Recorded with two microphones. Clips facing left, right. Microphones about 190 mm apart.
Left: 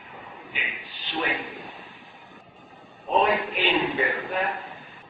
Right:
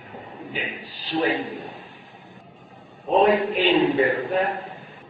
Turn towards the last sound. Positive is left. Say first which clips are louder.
# right 6 dB
turn(degrees=-35)  # may be behind; listen again after turning